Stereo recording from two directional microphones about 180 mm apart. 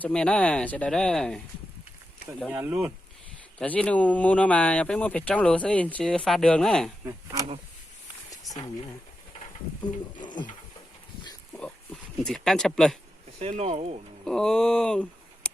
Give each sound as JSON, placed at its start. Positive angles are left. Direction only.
{"t": 0.0, "sound": "speech", "side_deg": 5}
{"t": 2.5, "sound": "speech", "side_deg": -10}
{"t": 3.6, "sound": "speech", "side_deg": 5}
{"t": 8.3, "sound": "a sound", "side_deg": 20}
{"t": 10.2, "sound": "speech", "side_deg": 25}
{"t": 12.2, "sound": "speech", "side_deg": 5}
{"t": 13.4, "sound": "speech", "side_deg": -35}
{"t": 14.3, "sound": "speech", "side_deg": 5}